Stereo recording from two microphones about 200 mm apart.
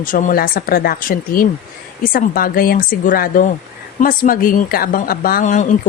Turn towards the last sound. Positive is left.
turn(degrees=40)  # may be behind; listen again after turning